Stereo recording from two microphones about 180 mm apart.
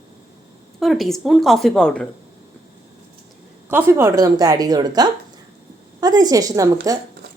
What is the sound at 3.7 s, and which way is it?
A woman's voice, 10° right (ahead or behind).